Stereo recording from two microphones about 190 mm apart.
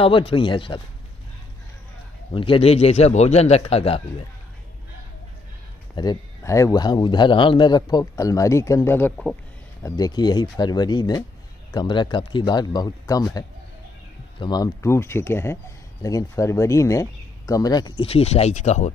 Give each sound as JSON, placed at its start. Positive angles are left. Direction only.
{"t": 0.0, "sound": "a man's voice", "side_deg": 30}
{"t": 2.3, "sound": "a man's voice", "side_deg": 30}
{"t": 5.9, "sound": "a man's voice", "side_deg": 20}